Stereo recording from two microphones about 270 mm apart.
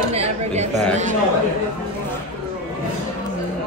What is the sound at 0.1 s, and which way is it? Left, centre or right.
Speech, right.